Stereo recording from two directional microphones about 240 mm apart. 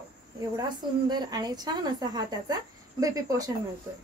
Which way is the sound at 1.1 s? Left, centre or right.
Centre.